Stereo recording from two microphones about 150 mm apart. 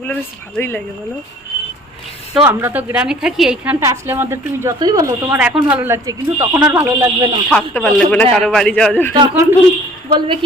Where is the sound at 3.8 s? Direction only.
20° right (ahead or behind).